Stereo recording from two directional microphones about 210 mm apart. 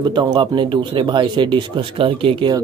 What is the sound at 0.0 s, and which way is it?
Speech, 20° right (ahead or behind).